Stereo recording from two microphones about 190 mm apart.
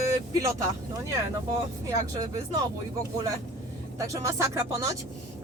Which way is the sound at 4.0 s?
15° right (ahead or behind).